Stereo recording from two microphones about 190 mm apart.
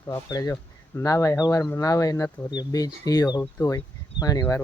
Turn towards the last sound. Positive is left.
turn(degrees=20)  # may be behind; listen again after turning